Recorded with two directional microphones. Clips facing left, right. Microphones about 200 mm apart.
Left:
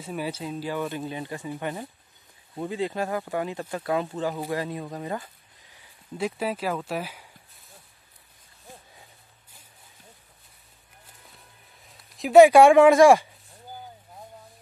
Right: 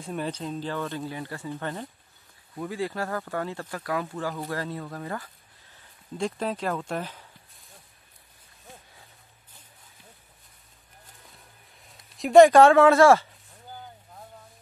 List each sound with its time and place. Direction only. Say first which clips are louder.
0.0 s speech: even; 5° left (ahead or behind)
2.5 s speech: left 2 dB; 25° left (ahead or behind)
5.8 s speech: even; 5° left (ahead or behind)
11.8 s speech: even; centre (ahead or behind)